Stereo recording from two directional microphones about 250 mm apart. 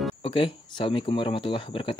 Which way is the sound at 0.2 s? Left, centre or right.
Left.